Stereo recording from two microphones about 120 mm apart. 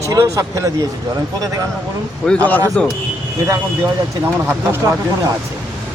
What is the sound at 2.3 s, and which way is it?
Speech, 10° left (ahead or behind).